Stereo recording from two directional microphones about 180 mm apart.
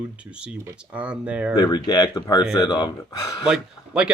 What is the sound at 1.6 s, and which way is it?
Speech, 20° left (ahead or behind).